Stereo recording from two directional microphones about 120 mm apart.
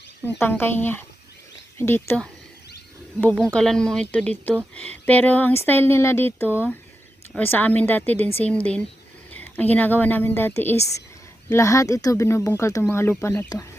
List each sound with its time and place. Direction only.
0.3 s speech: 15° left (ahead or behind)
3.3 s speech: 5° left (ahead or behind)